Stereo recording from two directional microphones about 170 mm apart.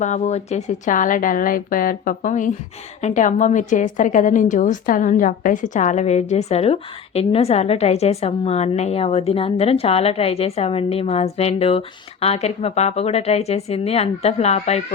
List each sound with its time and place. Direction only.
0.0 s a woman's voice: 45° left (ahead or behind)